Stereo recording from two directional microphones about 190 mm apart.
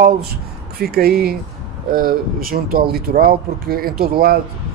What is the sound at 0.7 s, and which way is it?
Speech, 55° right (ahead or behind).